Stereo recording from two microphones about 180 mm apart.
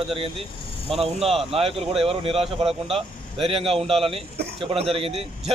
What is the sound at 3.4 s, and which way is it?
A man's voice, 30° right (ahead or behind).